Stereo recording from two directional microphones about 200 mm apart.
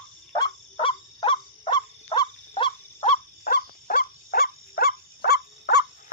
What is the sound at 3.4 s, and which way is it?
Dog, 45° left (ahead or behind).